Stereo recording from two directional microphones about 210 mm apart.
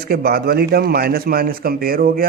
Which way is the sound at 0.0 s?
45° right (ahead or behind).